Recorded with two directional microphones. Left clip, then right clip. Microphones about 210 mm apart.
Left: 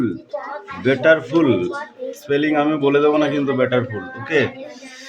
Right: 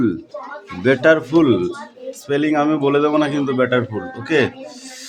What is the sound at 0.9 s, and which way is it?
A man's voice, 25° right (ahead or behind).